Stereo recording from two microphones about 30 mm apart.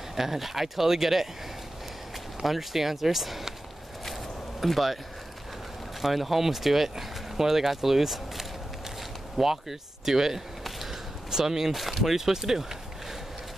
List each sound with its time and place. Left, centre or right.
0.1 s speech: centre
2.4 s speech: centre
4.6 s speech: centre
5.9 s speech: centre
10.6 s a sound: centre
11.2 s speech: centre
11.7 s speech: centre
12.3 s speech: centre